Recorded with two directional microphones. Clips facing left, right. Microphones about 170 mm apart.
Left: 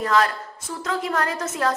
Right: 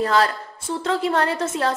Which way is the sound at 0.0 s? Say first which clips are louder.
Right 1 dB; 30° right (ahead or behind).